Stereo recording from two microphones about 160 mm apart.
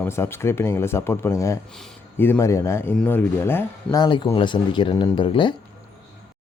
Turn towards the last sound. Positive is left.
turn(degrees=30)  # may be behind; listen again after turning